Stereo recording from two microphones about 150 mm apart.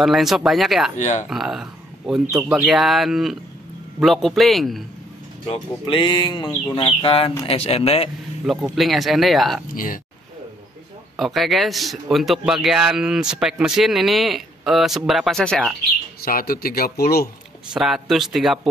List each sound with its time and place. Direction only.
0.0 s speech: centre (ahead or behind)
0.9 s speech: 50° left (ahead or behind)
1.3 s speech: centre (ahead or behind)
5.5 s speech: 35° left (ahead or behind)
8.5 s speech: centre (ahead or behind)
11.1 s speech: centre (ahead or behind)
16.3 s speech: 75° left (ahead or behind)
17.7 s speech: 5° right (ahead or behind)